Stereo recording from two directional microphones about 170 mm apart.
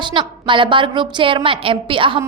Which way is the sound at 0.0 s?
30° right (ahead or behind).